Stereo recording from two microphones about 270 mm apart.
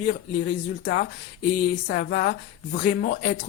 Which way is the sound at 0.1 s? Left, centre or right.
Left.